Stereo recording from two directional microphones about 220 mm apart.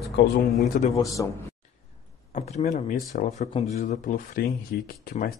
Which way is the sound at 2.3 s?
30° left (ahead or behind).